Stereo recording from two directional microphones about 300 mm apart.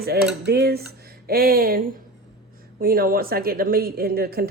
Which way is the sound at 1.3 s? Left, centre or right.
Right.